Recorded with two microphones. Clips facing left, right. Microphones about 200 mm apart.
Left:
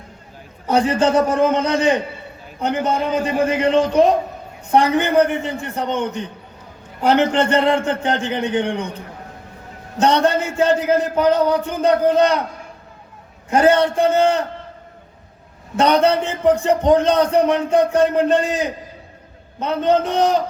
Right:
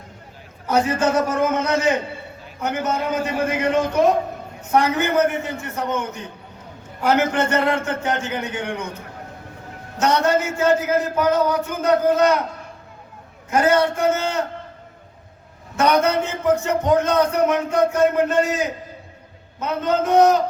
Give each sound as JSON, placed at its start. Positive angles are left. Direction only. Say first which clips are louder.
{"t": 0.7, "sound": "a man's voice", "louder": "left 3 dB", "side_deg": 30}
{"t": 3.2, "sound": "a man's voice", "louder": "left 4 dB", "side_deg": 30}
{"t": 10.0, "sound": "a man's voice", "louder": "left 2 dB", "side_deg": 30}
{"t": 13.5, "sound": "a man's voice", "louder": "left 3 dB", "side_deg": 30}
{"t": 15.7, "sound": "a man's voice", "louder": "left 3 dB", "side_deg": 30}